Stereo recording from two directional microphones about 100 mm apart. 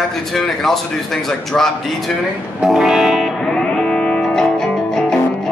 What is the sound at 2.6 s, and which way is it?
Music, 5° right (ahead or behind).